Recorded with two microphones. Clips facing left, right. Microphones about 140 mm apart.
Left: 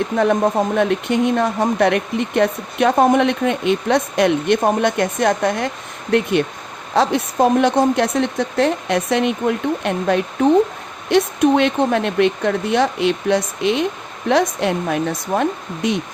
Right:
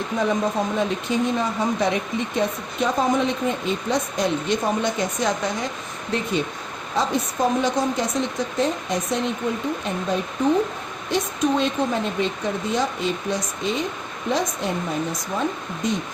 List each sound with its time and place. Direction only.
0.2 s a woman's voice: 60° left (ahead or behind)